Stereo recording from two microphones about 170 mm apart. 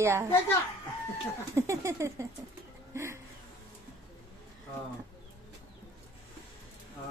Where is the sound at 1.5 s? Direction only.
15° right (ahead or behind).